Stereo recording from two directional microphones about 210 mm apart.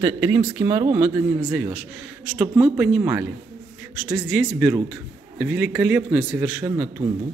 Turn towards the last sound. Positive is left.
turn(degrees=-10)  # may be behind; listen again after turning